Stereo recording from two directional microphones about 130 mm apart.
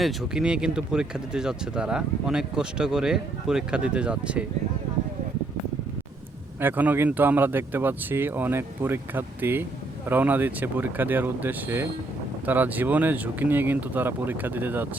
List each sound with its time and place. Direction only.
0.0 s speech: centre (ahead or behind)
6.6 s speech: 15° right (ahead or behind)